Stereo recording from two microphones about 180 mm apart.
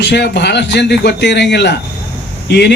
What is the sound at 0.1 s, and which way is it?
A man's voice, 65° left (ahead or behind).